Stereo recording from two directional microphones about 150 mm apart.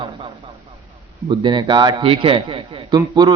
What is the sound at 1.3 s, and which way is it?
A man's voice, 30° right (ahead or behind).